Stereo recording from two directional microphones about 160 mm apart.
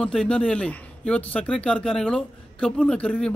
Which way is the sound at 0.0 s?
5° left (ahead or behind).